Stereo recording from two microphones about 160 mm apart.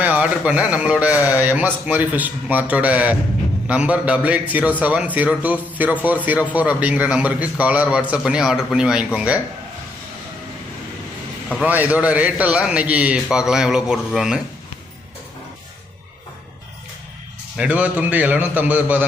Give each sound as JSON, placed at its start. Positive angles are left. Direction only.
{"t": 0.0, "sound": "a man's voice", "side_deg": -10}
{"t": 11.6, "sound": "a man's voice", "side_deg": -10}
{"t": 17.6, "sound": "a man's voice", "side_deg": -10}